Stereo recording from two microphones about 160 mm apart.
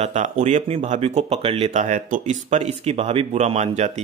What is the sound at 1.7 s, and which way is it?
Speech, 50° right (ahead or behind).